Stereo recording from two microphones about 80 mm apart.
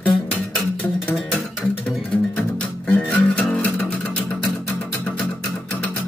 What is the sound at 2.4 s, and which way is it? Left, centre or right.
Music, left.